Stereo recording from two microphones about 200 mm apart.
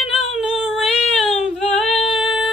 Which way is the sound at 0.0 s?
Centre (ahead or behind).